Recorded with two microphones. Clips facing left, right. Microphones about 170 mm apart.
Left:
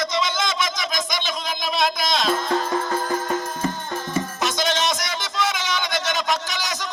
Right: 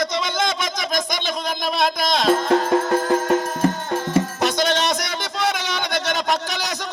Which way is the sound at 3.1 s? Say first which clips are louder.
Right 6 dB; 75° right (ahead or behind).